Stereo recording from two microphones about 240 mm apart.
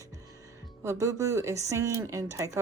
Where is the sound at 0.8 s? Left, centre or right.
Centre.